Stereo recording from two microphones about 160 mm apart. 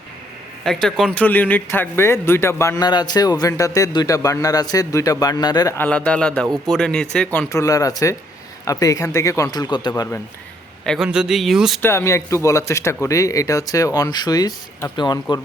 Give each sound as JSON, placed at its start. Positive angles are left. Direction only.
{"t": 0.6, "sound": "speech", "side_deg": 5}
{"t": 5.7, "sound": "a man's voice", "side_deg": 10}
{"t": 7.3, "sound": "speech", "side_deg": 20}
{"t": 10.8, "sound": "speech", "side_deg": 0}
{"t": 11.8, "sound": "speech", "side_deg": 15}